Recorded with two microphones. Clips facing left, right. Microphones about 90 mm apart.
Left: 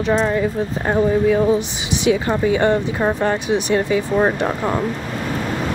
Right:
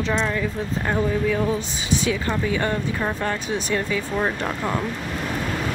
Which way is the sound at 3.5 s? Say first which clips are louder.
Left 7 dB; 70° left (ahead or behind).